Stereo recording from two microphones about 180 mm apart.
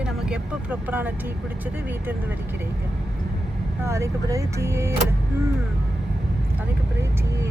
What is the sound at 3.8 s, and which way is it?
Speech, 15° right (ahead or behind).